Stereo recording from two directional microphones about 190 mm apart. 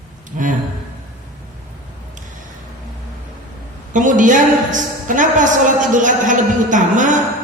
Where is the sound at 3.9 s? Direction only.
40° right (ahead or behind).